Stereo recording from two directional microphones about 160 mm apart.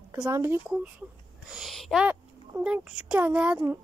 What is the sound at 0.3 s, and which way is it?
Speech, 15° right (ahead or behind).